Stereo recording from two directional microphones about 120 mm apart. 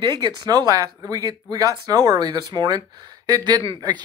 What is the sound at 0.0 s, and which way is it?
Speech, 35° right (ahead or behind).